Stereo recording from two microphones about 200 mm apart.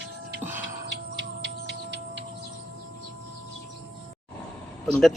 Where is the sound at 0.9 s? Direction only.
60° right (ahead or behind).